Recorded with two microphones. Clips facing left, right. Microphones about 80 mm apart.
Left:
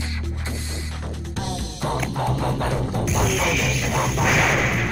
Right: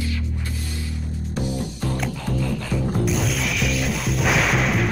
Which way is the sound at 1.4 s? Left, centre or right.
Left.